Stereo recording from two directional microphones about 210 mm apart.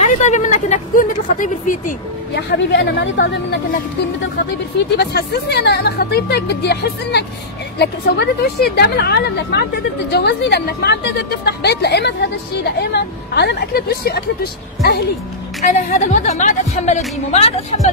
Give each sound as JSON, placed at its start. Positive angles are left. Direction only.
{"t": 0.0, "sound": "speech", "side_deg": 35}
{"t": 2.3, "sound": "speech", "side_deg": 55}
{"t": 4.9, "sound": "speech", "side_deg": 50}
{"t": 15.6, "sound": "speech", "side_deg": 35}